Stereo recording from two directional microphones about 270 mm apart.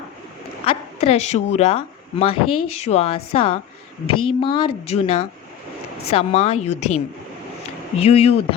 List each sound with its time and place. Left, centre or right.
0.6 s a woman's voice: left